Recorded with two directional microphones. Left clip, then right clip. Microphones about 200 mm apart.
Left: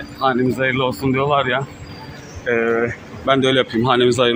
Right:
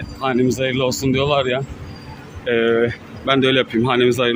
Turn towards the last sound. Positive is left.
turn(degrees=-10)  # may be behind; listen again after turning